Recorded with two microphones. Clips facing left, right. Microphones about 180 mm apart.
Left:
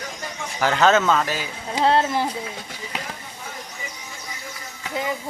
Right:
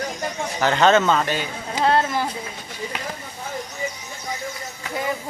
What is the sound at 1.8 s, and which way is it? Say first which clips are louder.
Speech: left 1 dB; 25° left (ahead or behind).